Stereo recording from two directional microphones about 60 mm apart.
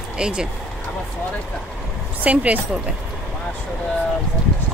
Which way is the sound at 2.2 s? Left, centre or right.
Right.